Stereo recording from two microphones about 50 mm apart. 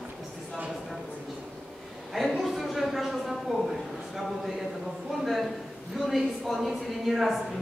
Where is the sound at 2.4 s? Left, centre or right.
Centre.